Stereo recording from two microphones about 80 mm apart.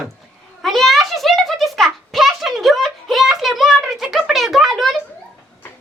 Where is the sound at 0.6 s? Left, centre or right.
Centre.